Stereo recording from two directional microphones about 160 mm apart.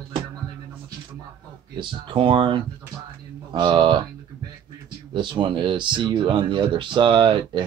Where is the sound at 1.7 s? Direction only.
30° right (ahead or behind).